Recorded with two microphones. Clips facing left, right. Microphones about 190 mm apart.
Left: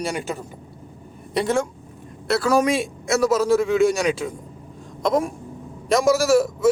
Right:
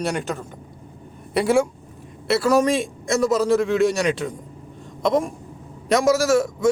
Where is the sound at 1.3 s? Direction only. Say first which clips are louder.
Right 3 dB; 10° right (ahead or behind).